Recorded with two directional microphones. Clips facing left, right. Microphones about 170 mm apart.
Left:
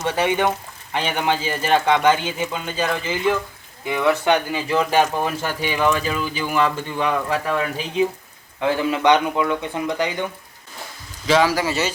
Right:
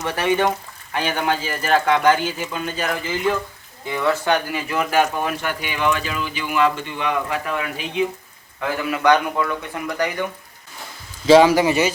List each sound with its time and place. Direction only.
0.0 s speech: 20° left (ahead or behind); by 8.0 s 35° left (ahead or behind)
8.6 s speech: 25° left (ahead or behind)
11.3 s speech: 25° right (ahead or behind)